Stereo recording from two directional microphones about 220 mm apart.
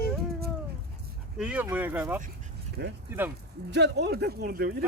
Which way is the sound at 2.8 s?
50° right (ahead or behind).